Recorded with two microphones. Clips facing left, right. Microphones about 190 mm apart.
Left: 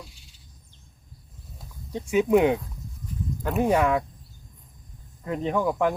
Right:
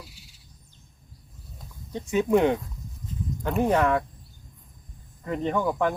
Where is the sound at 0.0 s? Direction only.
5° right (ahead or behind).